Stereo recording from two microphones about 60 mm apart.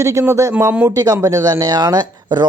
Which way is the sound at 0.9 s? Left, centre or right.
Right.